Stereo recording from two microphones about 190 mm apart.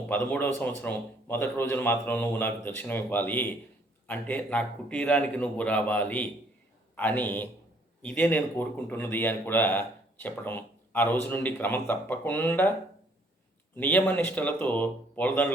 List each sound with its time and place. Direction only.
0.1 s speech: 10° left (ahead or behind)
13.7 s speech: 10° left (ahead or behind)